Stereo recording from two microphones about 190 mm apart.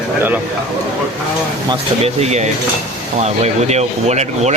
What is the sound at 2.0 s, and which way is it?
Speech, 35° right (ahead or behind).